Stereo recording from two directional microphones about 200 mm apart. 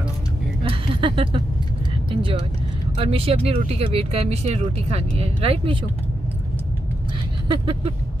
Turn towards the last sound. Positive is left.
turn(degrees=-25)  # may be behind; listen again after turning